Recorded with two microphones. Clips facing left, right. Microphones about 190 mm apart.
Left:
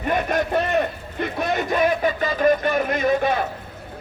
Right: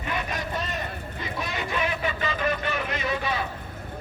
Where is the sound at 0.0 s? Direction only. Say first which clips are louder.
Left 9 dB; 50° left (ahead or behind).